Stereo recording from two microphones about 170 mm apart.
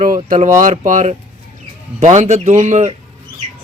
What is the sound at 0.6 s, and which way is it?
Speech, 50° right (ahead or behind).